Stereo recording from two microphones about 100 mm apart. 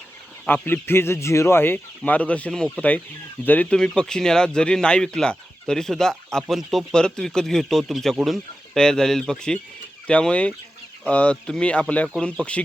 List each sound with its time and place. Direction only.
0.4 s a man's voice: 20° left (ahead or behind)
3.8 s speech: 5° left (ahead or behind)